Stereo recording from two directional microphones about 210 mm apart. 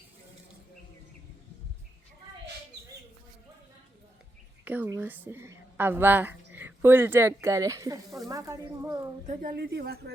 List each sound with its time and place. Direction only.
4.6 s a woman's voice: 10° right (ahead or behind)
9.2 s speech: 35° right (ahead or behind)